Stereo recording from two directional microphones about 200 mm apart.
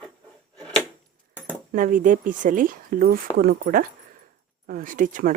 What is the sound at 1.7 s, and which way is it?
Speech, 40° right (ahead or behind).